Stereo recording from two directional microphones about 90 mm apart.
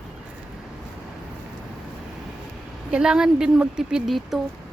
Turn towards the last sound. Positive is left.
turn(degrees=0)  # may be behind; listen again after turning